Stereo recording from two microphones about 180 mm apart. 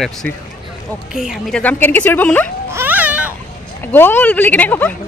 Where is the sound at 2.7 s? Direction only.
10° right (ahead or behind).